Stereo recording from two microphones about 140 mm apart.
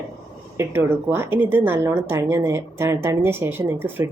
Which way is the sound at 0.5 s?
20° right (ahead or behind).